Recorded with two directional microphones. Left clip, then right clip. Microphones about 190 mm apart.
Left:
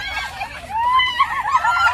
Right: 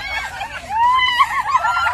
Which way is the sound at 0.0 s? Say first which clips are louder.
Right 1 dB; centre (ahead or behind).